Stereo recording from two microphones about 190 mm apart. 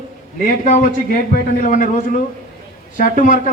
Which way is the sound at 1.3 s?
45° left (ahead or behind).